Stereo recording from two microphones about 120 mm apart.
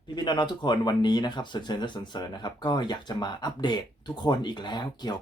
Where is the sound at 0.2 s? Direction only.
40° left (ahead or behind).